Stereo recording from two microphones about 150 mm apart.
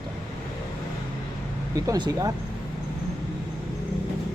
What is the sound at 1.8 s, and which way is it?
Speech, 25° right (ahead or behind).